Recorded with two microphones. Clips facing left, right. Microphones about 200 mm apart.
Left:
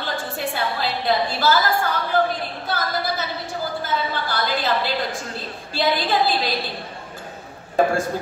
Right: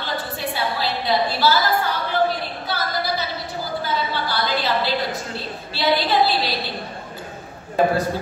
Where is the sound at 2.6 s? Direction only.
50° left (ahead or behind).